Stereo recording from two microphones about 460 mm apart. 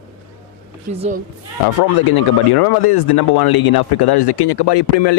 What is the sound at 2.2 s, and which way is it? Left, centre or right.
Speech, left.